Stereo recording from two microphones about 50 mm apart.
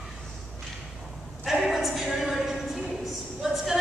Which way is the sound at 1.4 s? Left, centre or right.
Centre.